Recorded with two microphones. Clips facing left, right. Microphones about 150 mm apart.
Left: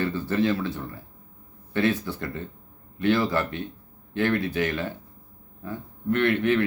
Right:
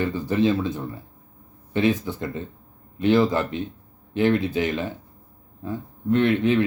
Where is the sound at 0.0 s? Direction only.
15° right (ahead or behind).